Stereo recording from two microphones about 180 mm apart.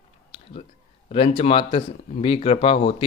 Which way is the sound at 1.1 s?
30° left (ahead or behind).